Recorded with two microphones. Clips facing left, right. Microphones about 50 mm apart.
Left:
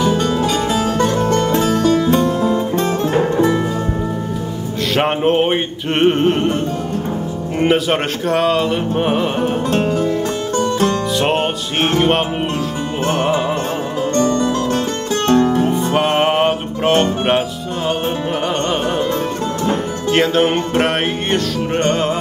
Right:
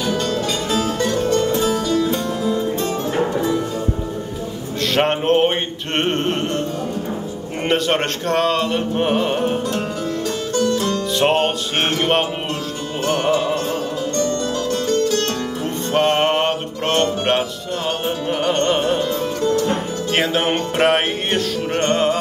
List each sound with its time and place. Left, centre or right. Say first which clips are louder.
0.1 s music: left 4 dB; centre
0.5 s music: left 4 dB; left
1.6 s music: left 4 dB; left
4.9 s music: left 1 dB; centre
7.6 s music: left 3 dB; centre
9.7 s music: left 6 dB; left
11.1 s music: even; centre
13.0 s music: left 1 dB; left
14.1 s music: left 6 dB; left
15.6 s music: left 3 dB; centre
19.7 s music: left 3 dB; centre